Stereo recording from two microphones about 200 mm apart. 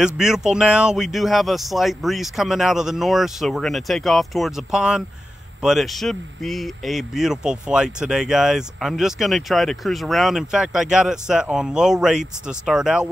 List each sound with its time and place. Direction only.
0.0 s speech: 5° right (ahead or behind)